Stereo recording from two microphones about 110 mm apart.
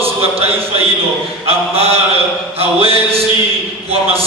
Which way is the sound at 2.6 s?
60° right (ahead or behind).